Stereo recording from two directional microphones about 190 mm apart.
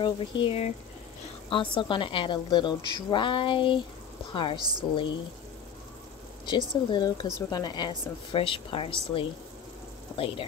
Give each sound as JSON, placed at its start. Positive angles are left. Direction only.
{"t": 0.0, "sound": "a woman's voice", "side_deg": 30}
{"t": 4.6, "sound": "a woman's voice", "side_deg": -20}
{"t": 6.4, "sound": "a woman's voice", "side_deg": 25}